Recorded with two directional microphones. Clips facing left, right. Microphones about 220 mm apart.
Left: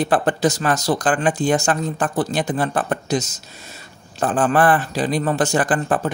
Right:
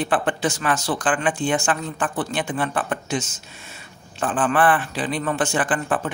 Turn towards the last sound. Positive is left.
turn(degrees=40)  # may be behind; listen again after turning